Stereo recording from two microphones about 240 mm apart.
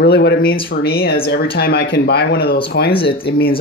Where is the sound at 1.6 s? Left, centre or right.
Left.